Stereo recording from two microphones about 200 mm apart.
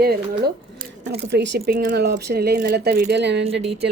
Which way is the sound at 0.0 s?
50° right (ahead or behind).